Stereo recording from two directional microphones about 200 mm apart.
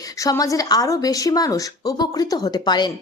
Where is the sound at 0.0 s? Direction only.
20° left (ahead or behind).